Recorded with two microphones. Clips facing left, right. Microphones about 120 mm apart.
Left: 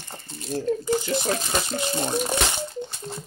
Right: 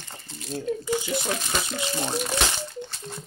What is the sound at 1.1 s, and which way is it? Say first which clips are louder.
Speech: left 3 dB; 25° left (ahead or behind).